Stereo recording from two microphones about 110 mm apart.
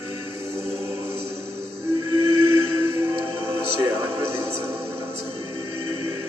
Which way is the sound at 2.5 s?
25° right (ahead or behind).